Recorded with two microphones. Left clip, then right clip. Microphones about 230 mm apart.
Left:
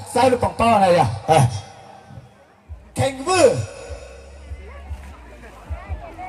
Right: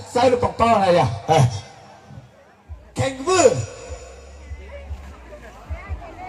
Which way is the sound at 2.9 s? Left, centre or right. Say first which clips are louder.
Even; left.